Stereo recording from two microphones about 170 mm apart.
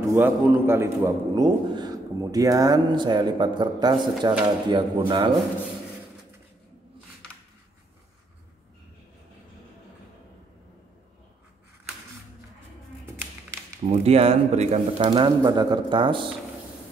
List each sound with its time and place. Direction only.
0.0 s a man's voice: 15° right (ahead or behind)
13.8 s a man's voice: 40° right (ahead or behind)